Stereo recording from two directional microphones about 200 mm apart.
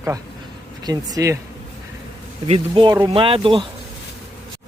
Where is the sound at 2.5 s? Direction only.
25° right (ahead or behind).